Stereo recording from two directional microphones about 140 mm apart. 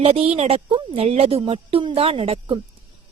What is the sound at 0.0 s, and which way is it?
Speech, 45° right (ahead or behind).